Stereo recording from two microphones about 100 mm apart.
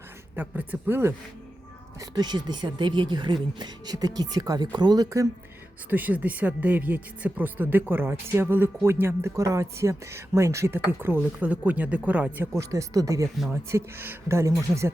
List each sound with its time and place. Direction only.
0.3 s speech: 15° right (ahead or behind)
2.0 s speech: 40° right (ahead or behind)
5.9 s speech: 15° right (ahead or behind)
12.5 s speech: 35° right (ahead or behind)